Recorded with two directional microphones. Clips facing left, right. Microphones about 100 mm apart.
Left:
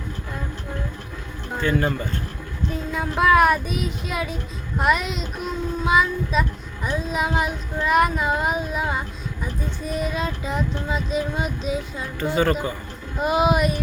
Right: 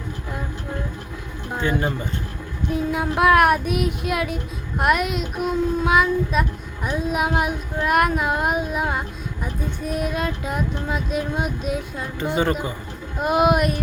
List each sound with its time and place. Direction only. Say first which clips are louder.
1.5 s speech: left 1 dB; 20° right (ahead or behind)
2.6 s child singing: right 4 dB; 10° right (ahead or behind)
3.7 s speech: right 5 dB; 60° right (ahead or behind)
4.8 s child singing: right 2 dB; 5° right (ahead or behind)
12.2 s speech: left 1 dB; 20° right (ahead or behind)
13.1 s child singing: right 1 dB; centre (ahead or behind)